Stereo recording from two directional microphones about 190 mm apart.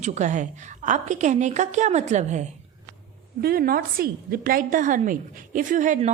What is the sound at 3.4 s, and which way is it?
A woman's voice, 50° right (ahead or behind).